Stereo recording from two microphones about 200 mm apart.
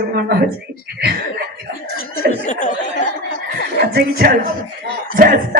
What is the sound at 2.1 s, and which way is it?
Speech, 40° left (ahead or behind).